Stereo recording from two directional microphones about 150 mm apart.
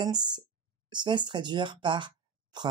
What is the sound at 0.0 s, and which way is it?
Speech, 30° right (ahead or behind).